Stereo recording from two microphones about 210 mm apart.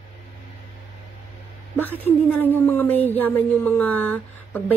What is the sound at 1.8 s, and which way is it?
Speech, 10° left (ahead or behind).